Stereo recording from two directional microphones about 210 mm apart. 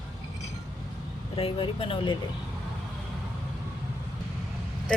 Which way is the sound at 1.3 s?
25° left (ahead or behind).